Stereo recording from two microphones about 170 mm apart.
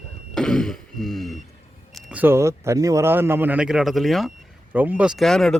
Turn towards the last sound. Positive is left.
turn(degrees=0)  # may be behind; listen again after turning